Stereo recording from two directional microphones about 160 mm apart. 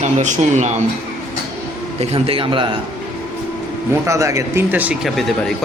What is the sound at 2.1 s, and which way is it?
Speech, 35° right (ahead or behind).